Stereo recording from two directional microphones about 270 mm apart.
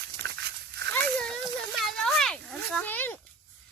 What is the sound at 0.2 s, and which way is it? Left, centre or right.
Dog, right.